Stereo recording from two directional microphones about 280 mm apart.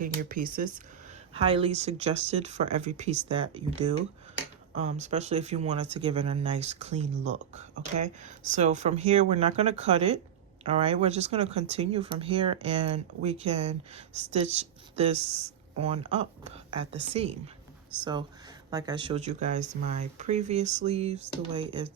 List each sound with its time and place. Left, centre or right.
0.0 s speech: right
16.9 s speech: right